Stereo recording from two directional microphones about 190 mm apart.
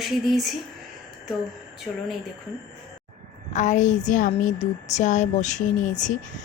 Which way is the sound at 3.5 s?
40° left (ahead or behind).